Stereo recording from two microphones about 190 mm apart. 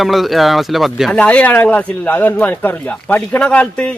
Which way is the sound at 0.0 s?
Centre (ahead or behind).